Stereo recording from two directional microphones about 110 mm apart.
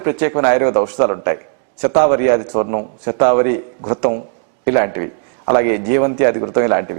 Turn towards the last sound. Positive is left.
turn(degrees=-15)  # may be behind; listen again after turning